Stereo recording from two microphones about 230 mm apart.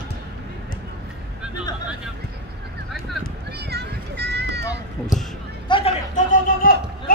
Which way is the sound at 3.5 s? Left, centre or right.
Right.